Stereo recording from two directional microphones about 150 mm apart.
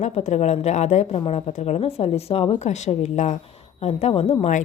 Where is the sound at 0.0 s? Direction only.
50° left (ahead or behind).